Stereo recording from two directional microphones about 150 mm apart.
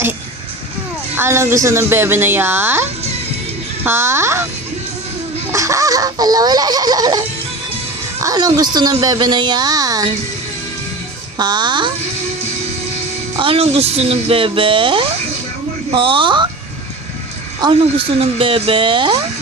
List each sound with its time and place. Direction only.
1.1 s a woman's voice: 15° right (ahead or behind)
3.8 s a woman's voice: 15° right (ahead or behind)
5.5 s a woman's voice: 20° right (ahead or behind)
11.3 s a woman's voice: 30° right (ahead or behind)
13.3 s speech: 35° right (ahead or behind)
17.6 s speech: 35° right (ahead or behind)